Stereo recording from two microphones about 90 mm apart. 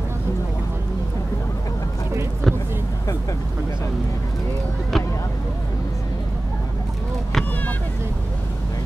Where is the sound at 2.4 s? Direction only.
5° left (ahead or behind).